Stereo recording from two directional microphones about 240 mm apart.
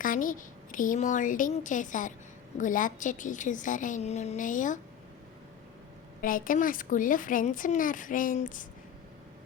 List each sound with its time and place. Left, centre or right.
0.0 s speech: left
6.2 s speech: left